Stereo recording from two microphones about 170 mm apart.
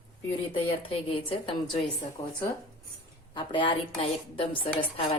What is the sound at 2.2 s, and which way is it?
A woman's voice, 20° left (ahead or behind).